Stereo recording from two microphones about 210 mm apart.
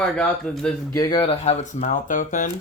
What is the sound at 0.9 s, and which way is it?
Speech, 20° left (ahead or behind).